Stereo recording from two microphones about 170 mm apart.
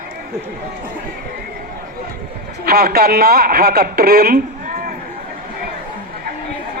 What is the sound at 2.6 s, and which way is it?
Speech, 65° right (ahead or behind).